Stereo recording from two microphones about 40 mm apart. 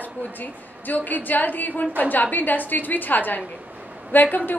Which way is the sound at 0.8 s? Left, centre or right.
Left.